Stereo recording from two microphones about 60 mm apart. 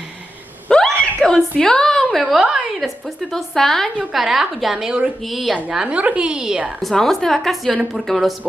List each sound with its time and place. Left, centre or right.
0.7 s a sound: centre
2.2 s a woman's voice: centre
3.2 s a woman's voice: centre
4.1 s a woman's voice: centre
5.2 s a woman's voice: centre
6.8 s a woman's voice: centre